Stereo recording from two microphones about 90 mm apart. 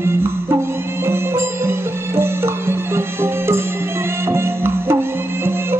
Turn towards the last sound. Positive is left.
turn(degrees=-30)  # may be behind; listen again after turning